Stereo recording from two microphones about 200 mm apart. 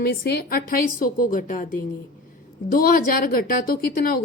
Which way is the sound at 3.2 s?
45° left (ahead or behind).